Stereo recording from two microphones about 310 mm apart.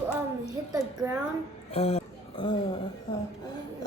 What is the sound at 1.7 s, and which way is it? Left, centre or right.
Speech, centre.